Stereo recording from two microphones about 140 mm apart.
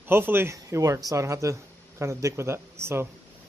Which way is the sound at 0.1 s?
15° right (ahead or behind).